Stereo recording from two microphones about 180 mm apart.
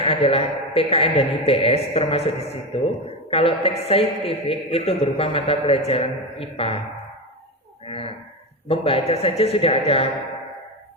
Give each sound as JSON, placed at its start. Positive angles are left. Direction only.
{"t": 0.0, "sound": "a woman's voice", "side_deg": 35}
{"t": 7.9, "sound": "cattle", "side_deg": 30}
{"t": 8.6, "sound": "a woman's voice", "side_deg": 30}